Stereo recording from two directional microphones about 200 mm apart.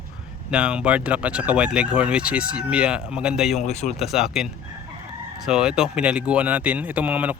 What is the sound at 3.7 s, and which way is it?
Speech, 35° left (ahead or behind).